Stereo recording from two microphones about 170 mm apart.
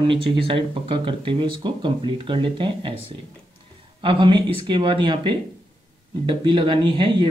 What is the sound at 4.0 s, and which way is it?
Speech, 30° right (ahead or behind).